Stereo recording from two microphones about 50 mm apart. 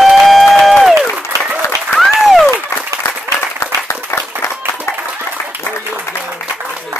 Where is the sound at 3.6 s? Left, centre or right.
Left.